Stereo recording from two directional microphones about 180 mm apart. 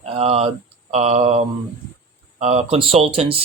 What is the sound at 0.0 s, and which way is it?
Speech, 35° right (ahead or behind).